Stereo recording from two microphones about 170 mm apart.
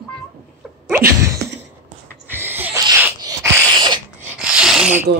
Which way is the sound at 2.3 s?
10° right (ahead or behind).